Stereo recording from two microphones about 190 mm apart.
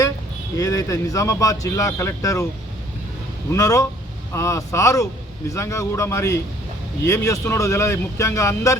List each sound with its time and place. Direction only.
0.5 s speech: 15° left (ahead or behind)
3.5 s speech: 15° left (ahead or behind)